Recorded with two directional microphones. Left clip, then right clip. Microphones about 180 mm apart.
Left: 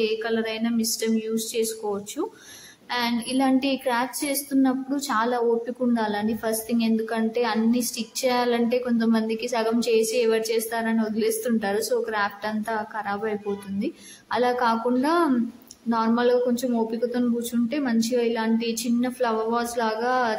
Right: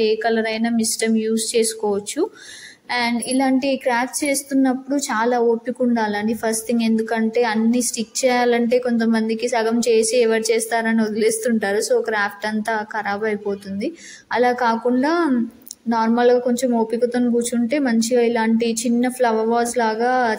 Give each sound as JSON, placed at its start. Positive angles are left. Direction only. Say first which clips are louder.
{"t": 0.0, "sound": "a woman's voice", "louder": "right 6 dB", "side_deg": -25}